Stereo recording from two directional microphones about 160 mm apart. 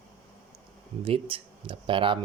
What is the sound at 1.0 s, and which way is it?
Speech, 35° right (ahead or behind).